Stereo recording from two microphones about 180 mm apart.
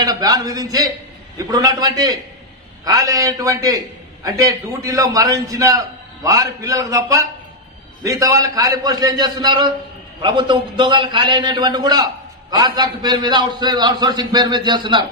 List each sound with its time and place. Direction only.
0.0 s a man's voice: 20° right (ahead or behind)